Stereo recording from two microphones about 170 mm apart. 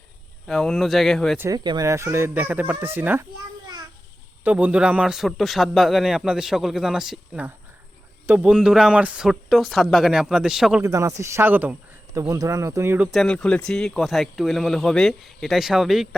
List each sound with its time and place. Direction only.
0.4 s a man's voice: 5° left (ahead or behind)
1.4 s speech: 20° right (ahead or behind)
4.4 s a man's voice: 5° right (ahead or behind)
10.8 s speech: 20° right (ahead or behind)
13.1 s a man's voice: centre (ahead or behind)